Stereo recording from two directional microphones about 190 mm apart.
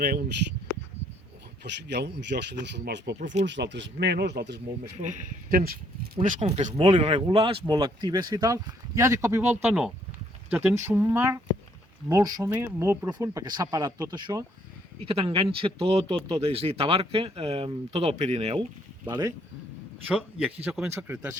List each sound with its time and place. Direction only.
0.0 s speech: 55° right (ahead or behind)
1.6 s speech: 65° right (ahead or behind)
4.9 s speech: 45° right (ahead or behind)
6.2 s speech: 40° right (ahead or behind)
19.0 s speech: 20° right (ahead or behind)
20.7 s speech: 5° right (ahead or behind)